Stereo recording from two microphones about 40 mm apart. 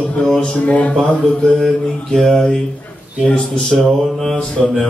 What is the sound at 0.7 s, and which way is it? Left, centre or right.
Speech, left.